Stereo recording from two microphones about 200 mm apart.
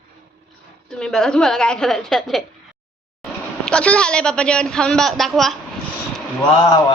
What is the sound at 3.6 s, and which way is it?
A man's voice, 5° left (ahead or behind).